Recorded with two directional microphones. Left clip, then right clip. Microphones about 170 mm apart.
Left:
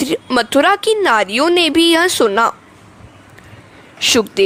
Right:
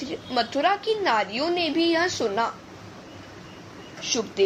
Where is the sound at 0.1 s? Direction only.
65° left (ahead or behind).